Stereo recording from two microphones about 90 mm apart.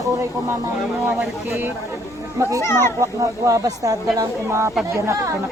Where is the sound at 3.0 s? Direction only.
35° right (ahead or behind).